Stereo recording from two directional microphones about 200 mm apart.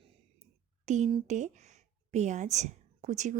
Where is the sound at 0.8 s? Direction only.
35° right (ahead or behind).